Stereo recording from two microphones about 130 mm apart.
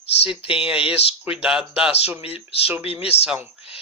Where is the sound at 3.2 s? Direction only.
10° right (ahead or behind).